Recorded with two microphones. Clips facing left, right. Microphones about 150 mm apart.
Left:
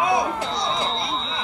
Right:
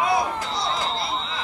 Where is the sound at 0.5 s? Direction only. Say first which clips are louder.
Left 1 dB; 5° right (ahead or behind).